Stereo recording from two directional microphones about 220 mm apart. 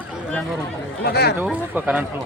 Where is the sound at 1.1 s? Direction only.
45° left (ahead or behind).